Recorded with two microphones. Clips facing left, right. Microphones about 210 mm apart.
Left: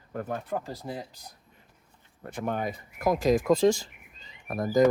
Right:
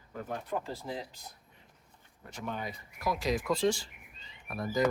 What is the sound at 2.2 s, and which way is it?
Speech, 55° left (ahead or behind).